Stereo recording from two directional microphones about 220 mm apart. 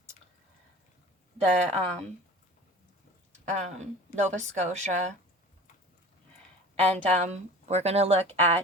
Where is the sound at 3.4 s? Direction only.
30° right (ahead or behind).